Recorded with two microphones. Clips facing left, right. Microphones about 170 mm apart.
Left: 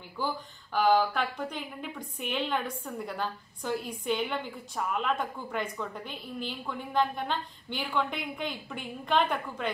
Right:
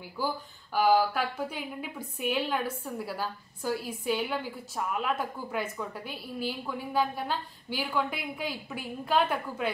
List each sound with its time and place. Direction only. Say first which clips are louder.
0.2 s a woman's voice: right 1 dB; 10° right (ahead or behind)